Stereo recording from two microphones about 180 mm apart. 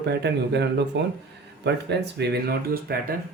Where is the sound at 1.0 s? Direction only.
80° right.